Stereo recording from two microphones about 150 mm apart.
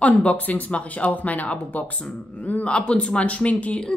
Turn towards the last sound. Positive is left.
turn(degrees=5)  # may be behind; listen again after turning